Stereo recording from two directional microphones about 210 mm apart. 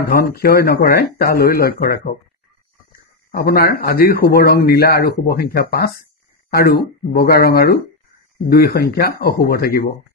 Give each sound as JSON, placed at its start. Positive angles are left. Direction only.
{"t": 0.1, "sound": "speech", "side_deg": 45}